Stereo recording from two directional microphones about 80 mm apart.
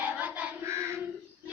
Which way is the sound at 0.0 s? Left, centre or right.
Right.